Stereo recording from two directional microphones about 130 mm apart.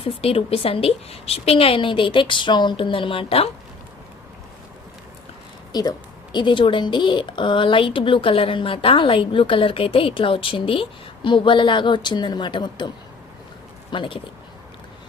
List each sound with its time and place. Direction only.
0.0 s a woman's voice: 45° left (ahead or behind)
6.3 s a woman's voice: 40° left (ahead or behind)
13.9 s a woman's voice: 40° left (ahead or behind)